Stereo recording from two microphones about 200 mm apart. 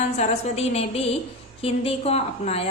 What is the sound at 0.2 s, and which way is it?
A woman's voice, 30° left (ahead or behind).